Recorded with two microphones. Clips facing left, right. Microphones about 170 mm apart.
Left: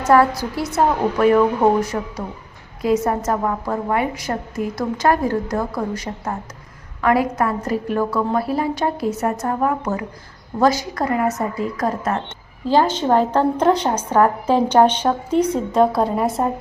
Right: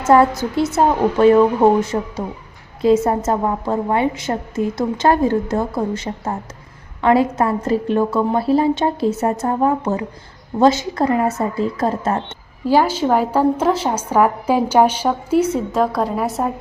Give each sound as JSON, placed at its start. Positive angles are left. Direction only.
{"t": 0.0, "sound": "a woman's voice", "side_deg": -25}
{"t": 12.6, "sound": "a woman's voice", "side_deg": -10}